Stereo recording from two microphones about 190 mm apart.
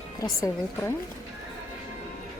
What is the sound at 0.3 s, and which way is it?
Speech, 15° left (ahead or behind).